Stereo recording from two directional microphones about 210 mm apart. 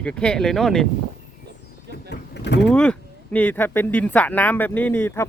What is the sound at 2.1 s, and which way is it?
Vehicle, 55° left (ahead or behind).